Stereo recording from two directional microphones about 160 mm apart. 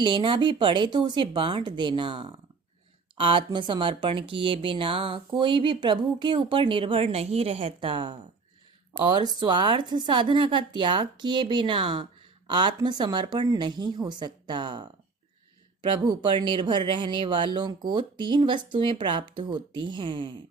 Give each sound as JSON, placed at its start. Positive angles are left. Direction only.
{"t": 0.0, "sound": "speech", "side_deg": -30}